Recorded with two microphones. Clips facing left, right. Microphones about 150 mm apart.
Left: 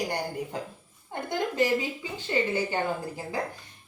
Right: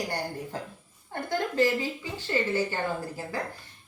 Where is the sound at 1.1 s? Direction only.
15° left (ahead or behind).